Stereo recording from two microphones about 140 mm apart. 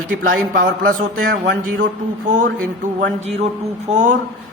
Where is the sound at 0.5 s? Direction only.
85° right.